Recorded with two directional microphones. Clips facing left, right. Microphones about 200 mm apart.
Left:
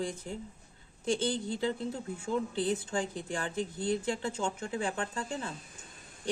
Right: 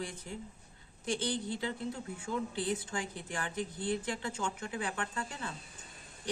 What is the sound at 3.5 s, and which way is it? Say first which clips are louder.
Speech: left 3 dB; 25° left (ahead or behind).